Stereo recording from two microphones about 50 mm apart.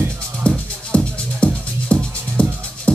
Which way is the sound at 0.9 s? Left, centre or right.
Left.